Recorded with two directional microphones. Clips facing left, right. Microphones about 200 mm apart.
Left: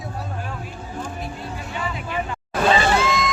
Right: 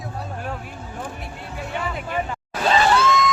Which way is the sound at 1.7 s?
50° right (ahead or behind).